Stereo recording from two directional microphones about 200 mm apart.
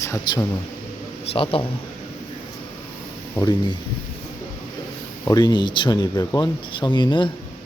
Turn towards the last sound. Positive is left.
turn(degrees=25)  # may be behind; listen again after turning